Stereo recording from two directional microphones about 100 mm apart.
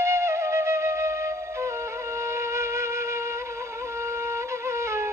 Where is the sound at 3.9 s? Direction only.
25° right (ahead or behind).